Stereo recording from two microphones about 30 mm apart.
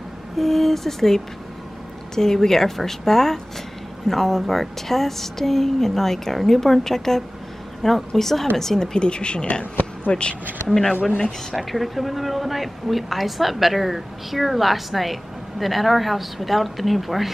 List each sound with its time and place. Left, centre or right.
0.4 s a woman's voice: centre
8.9 s speech: left
10.7 s a woman's voice: centre
11.5 s speech: centre